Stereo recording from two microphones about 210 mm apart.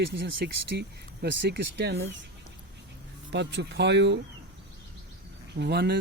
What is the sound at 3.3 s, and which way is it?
Speech, 55° right (ahead or behind).